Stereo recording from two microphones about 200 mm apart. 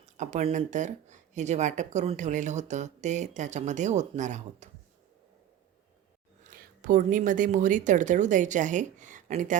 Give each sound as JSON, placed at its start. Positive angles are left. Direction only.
{"t": 0.0, "sound": "speech", "side_deg": -35}
{"t": 6.4, "sound": "speech", "side_deg": -40}